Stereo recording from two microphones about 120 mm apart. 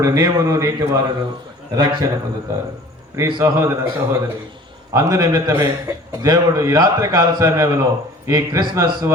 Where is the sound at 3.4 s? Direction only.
25° right (ahead or behind).